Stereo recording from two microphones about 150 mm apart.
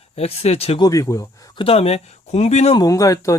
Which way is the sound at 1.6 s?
40° left (ahead or behind).